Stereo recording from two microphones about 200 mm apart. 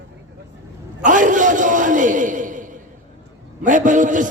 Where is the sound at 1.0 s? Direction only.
40° right (ahead or behind).